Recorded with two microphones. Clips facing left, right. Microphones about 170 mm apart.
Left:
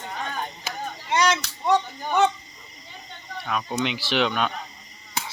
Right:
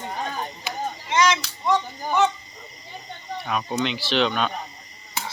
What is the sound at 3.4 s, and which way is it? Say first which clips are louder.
Speech: right 1 dB; 5° right (ahead or behind).